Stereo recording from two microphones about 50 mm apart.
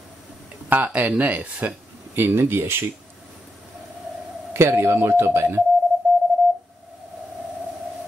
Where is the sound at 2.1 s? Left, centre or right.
Right.